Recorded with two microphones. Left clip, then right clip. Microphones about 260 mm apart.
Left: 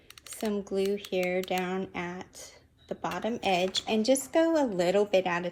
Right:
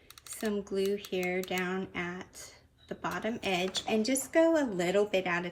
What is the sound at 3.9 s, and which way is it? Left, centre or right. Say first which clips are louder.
Speech: left 5 dB; right.